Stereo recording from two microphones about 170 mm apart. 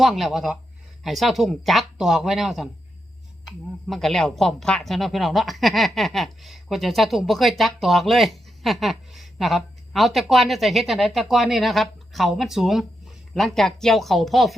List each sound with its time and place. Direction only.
0.0 s a woman's voice: centre (ahead or behind)
3.8 s a woman's voice: centre (ahead or behind)